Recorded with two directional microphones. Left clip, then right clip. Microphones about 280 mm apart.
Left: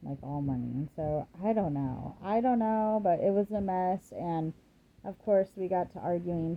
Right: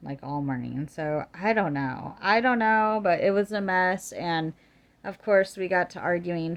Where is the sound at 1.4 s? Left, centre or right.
Centre.